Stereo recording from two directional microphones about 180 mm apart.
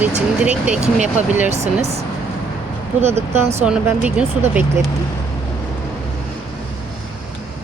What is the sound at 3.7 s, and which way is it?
Speech, 5° right (ahead or behind).